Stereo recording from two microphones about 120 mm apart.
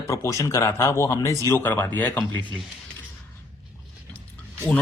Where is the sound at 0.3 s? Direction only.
25° left (ahead or behind).